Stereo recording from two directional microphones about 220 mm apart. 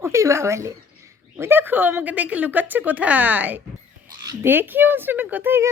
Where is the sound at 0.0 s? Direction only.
15° right (ahead or behind).